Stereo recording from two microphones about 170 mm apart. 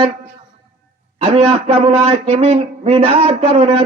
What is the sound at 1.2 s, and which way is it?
Speech, 35° right (ahead or behind).